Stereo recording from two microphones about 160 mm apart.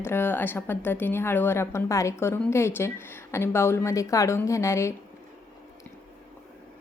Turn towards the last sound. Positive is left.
turn(degrees=20)  # may be behind; listen again after turning